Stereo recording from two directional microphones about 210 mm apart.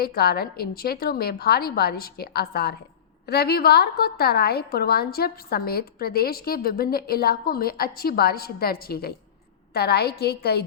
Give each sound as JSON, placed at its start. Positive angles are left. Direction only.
{"t": 0.0, "sound": "a woman's voice", "side_deg": 45}